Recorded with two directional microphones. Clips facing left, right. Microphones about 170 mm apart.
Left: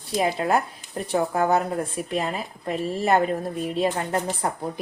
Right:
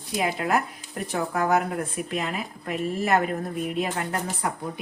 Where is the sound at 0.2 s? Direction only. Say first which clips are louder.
Left 2 dB; 30° left (ahead or behind).